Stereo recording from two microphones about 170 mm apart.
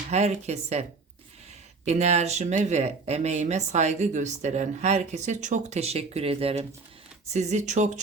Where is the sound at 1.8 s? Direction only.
40° right (ahead or behind).